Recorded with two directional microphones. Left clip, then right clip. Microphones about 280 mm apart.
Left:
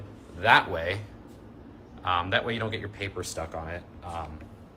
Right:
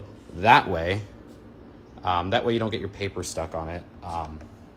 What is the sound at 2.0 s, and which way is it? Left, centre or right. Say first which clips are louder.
Speech: right 2 dB; centre.